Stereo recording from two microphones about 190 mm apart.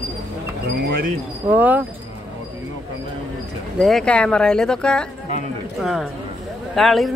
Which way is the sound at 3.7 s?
Centre (ahead or behind).